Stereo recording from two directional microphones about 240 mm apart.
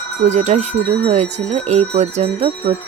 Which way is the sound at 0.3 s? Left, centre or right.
Right.